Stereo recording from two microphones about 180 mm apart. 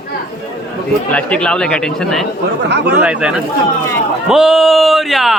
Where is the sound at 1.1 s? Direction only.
10° left (ahead or behind).